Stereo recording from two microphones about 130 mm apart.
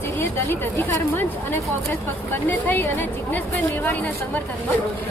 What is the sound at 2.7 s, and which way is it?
Speech, 15° left (ahead or behind).